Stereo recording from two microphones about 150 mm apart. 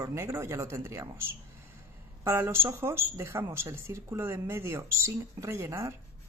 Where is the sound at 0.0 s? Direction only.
20° right (ahead or behind).